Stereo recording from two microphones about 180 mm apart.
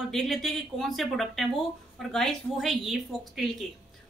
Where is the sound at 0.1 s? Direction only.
Centre (ahead or behind).